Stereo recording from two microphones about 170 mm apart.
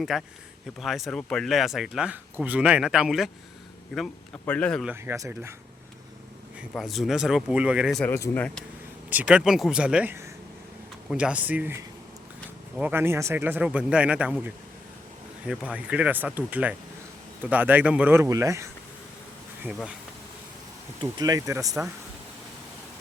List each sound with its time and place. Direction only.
0.0 s speech: centre (ahead or behind)
4.9 s speech: 15° right (ahead or behind)
6.7 s speech: centre (ahead or behind)
8.0 s speech: 10° left (ahead or behind)
9.0 s speech: 10° right (ahead or behind)
21.0 s speech: 25° right (ahead or behind)